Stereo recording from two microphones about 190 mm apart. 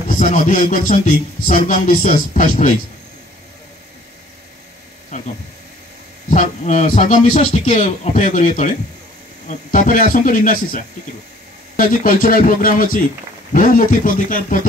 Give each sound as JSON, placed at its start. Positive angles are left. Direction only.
{"t": 0.2, "sound": "speech", "side_deg": 45}
{"t": 6.3, "sound": "a man's voice", "side_deg": 40}